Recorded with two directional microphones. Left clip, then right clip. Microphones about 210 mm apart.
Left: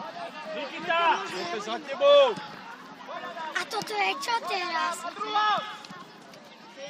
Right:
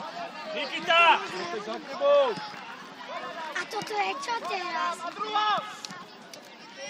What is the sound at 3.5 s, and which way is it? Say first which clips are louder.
Speech: left 1 dB; 15° left (ahead or behind).